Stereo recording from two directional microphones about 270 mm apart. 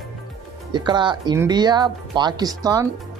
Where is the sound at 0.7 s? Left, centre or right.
Centre.